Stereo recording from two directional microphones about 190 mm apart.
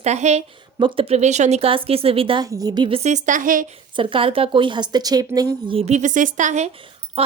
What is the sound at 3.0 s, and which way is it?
Speech, 40° right (ahead or behind).